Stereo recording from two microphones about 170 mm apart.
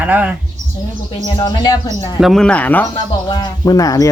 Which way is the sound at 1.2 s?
25° left (ahead or behind).